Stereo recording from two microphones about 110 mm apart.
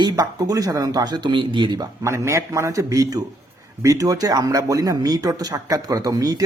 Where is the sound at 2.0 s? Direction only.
25° right (ahead or behind).